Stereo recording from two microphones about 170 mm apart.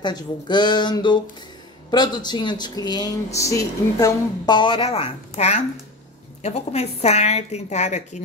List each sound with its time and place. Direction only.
0.0 s a woman's voice: 25° left (ahead or behind); by 8.2 s 40° left (ahead or behind)